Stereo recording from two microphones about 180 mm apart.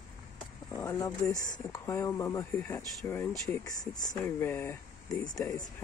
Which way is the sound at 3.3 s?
Centre (ahead or behind).